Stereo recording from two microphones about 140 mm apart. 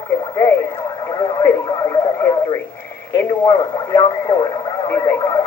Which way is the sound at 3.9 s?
35° left (ahead or behind).